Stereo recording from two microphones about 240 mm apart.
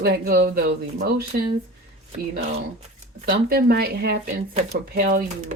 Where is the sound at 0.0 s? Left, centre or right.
Right.